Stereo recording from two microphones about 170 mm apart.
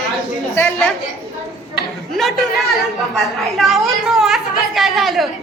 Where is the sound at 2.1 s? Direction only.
Centre (ahead or behind).